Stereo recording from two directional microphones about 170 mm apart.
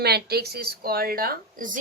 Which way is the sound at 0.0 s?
70° right (ahead or behind).